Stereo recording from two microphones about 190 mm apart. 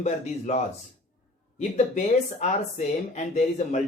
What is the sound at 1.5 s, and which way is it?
Speech, 35° left (ahead or behind).